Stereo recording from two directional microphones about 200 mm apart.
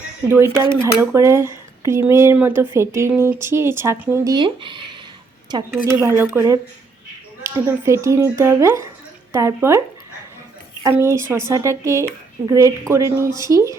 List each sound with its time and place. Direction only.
0.3 s speech: 10° right (ahead or behind)
6.0 s speech: 10° right (ahead or behind)
10.8 s speech: 15° right (ahead or behind)